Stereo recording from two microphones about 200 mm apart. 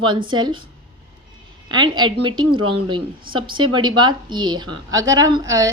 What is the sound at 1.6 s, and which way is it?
A woman's voice, 20° right (ahead or behind).